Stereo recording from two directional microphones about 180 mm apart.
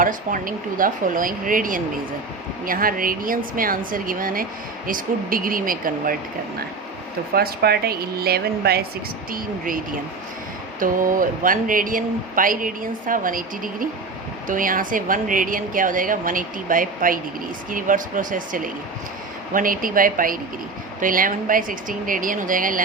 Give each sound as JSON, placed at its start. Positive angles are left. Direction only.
{"t": 0.0, "sound": "speech", "side_deg": -50}
{"t": 7.3, "sound": "a woman's voice", "side_deg": -60}